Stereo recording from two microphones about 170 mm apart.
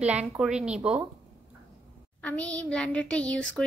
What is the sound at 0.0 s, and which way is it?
Speech, 5° right (ahead or behind).